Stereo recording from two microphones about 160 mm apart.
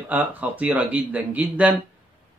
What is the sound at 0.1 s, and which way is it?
Speech, 10° right (ahead or behind).